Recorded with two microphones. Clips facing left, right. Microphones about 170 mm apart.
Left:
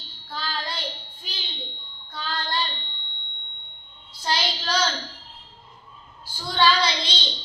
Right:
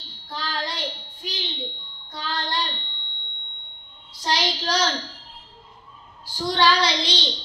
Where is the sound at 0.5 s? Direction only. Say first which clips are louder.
Right 3 dB; 75° right (ahead or behind).